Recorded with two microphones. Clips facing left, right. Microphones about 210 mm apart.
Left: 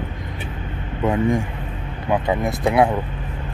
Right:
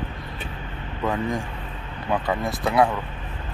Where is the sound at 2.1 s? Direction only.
20° left (ahead or behind).